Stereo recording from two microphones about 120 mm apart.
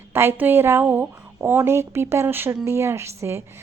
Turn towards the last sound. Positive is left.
turn(degrees=-25)  # may be behind; listen again after turning